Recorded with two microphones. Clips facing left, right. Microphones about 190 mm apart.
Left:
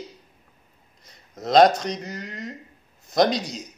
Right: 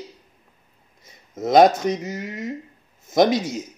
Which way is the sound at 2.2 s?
20° right (ahead or behind).